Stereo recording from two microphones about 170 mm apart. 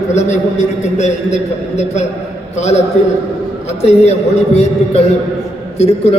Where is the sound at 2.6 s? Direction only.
40° left (ahead or behind).